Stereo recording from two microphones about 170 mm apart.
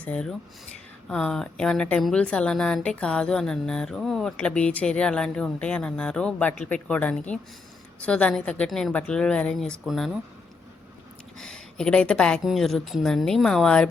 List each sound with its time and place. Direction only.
0.0 s a woman's voice: 5° left (ahead or behind)
11.3 s a woman's voice: 5° left (ahead or behind)